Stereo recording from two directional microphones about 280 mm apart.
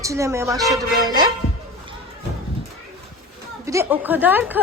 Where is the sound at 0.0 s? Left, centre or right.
Centre.